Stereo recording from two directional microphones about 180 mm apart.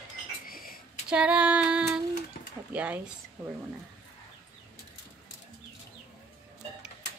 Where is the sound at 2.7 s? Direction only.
5° right (ahead or behind).